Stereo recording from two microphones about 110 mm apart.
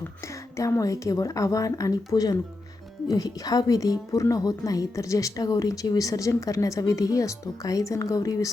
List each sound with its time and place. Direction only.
0.5 s a woman's voice: 30° left (ahead or behind)